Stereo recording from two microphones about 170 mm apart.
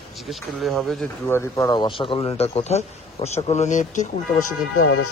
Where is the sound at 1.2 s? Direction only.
15° left (ahead or behind); by 4.5 s 45° left (ahead or behind).